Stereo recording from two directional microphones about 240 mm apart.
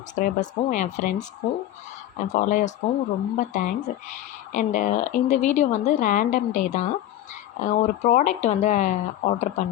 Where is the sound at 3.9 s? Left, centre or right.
Left.